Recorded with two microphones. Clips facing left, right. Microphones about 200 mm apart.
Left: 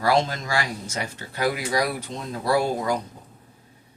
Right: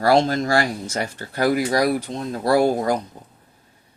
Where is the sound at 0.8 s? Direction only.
55° right (ahead or behind).